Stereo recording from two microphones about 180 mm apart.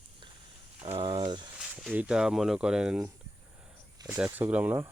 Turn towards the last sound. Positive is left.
turn(degrees=-10)  # may be behind; listen again after turning